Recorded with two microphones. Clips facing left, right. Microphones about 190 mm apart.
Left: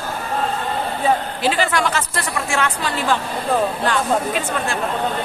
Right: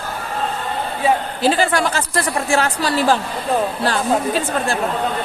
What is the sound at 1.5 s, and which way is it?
Speech, 35° right (ahead or behind).